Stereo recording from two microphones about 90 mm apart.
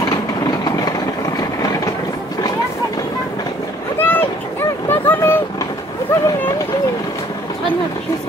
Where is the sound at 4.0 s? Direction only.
25° left (ahead or behind).